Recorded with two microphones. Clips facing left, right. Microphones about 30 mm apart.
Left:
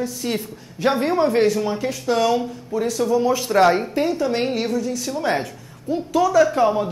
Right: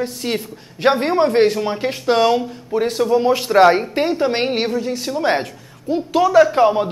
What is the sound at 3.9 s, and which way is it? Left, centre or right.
Speech, right.